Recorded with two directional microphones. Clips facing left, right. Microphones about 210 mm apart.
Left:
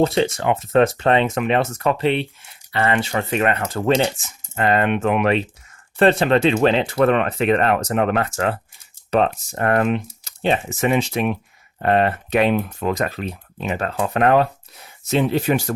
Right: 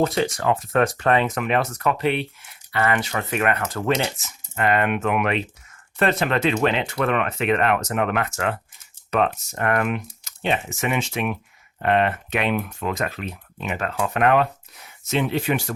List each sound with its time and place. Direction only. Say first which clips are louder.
0.0 s speech: left 3 dB; 25° left (ahead or behind)